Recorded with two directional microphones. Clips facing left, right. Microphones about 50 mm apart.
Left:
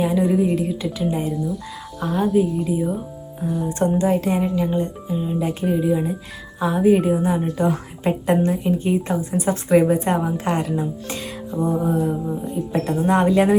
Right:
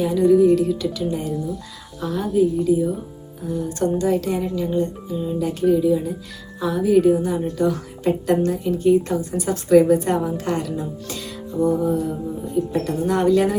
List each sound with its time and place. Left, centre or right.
0.0 s a woman's voice: left